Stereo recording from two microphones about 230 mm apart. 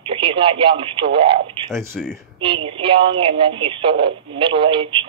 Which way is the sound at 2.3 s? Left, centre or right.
Right.